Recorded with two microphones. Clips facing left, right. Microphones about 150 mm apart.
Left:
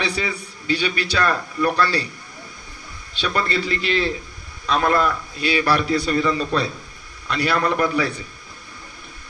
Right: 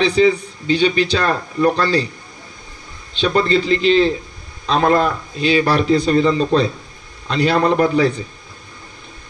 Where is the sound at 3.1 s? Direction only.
25° right (ahead or behind).